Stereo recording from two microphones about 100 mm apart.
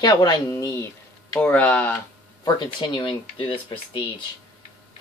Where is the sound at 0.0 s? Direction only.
45° left (ahead or behind).